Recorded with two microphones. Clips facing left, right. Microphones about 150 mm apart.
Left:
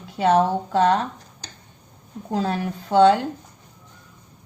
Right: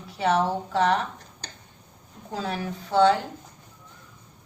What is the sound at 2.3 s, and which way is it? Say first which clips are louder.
Speech: left 7 dB; 35° left (ahead or behind).